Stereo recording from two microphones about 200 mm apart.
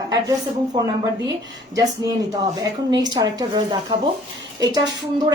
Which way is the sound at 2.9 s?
20° right (ahead or behind).